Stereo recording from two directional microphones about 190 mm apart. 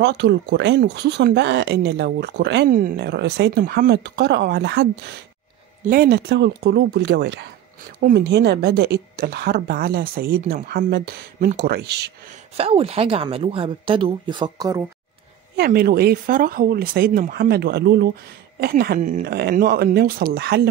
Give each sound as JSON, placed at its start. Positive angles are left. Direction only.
{"t": 0.0, "sound": "speech", "side_deg": -65}
{"t": 5.9, "sound": "speech", "side_deg": -55}
{"t": 12.3, "sound": "speech", "side_deg": -30}
{"t": 15.5, "sound": "speech", "side_deg": -55}
{"t": 19.2, "sound": "speech", "side_deg": -55}